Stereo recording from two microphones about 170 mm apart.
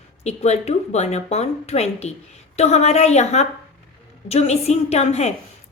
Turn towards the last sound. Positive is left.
turn(degrees=40)  # may be behind; listen again after turning